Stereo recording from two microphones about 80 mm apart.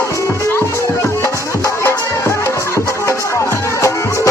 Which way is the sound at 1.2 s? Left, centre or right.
Left.